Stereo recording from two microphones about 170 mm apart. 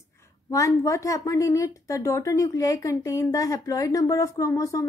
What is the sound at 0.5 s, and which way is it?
A woman's voice, 20° left (ahead or behind).